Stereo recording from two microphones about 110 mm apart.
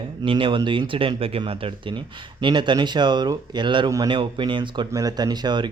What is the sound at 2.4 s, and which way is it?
Speech, 45° right (ahead or behind).